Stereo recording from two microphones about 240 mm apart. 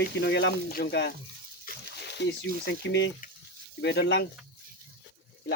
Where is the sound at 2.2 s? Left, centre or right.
Left.